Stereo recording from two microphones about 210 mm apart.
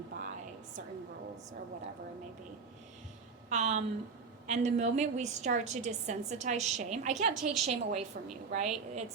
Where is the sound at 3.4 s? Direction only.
35° right (ahead or behind).